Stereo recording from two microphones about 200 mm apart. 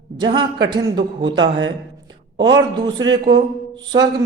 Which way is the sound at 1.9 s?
20° right (ahead or behind).